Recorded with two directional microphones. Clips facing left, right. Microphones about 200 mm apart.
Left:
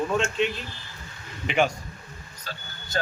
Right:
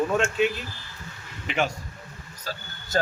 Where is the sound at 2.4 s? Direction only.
40° right (ahead or behind).